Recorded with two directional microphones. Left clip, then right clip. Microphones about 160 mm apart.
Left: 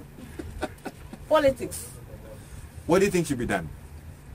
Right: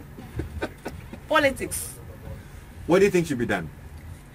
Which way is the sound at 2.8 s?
60° left (ahead or behind).